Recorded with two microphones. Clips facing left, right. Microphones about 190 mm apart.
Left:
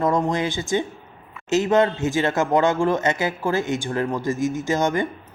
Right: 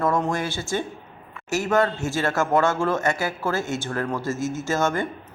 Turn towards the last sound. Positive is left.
turn(degrees=15)  # may be behind; listen again after turning